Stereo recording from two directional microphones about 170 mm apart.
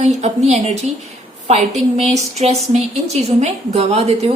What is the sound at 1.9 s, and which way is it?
A woman's voice, 40° right (ahead or behind).